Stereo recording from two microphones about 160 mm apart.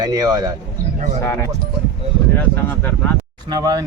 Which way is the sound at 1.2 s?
15° left (ahead or behind).